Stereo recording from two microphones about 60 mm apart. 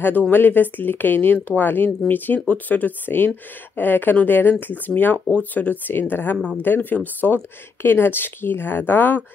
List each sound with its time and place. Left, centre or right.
0.3 s speech: left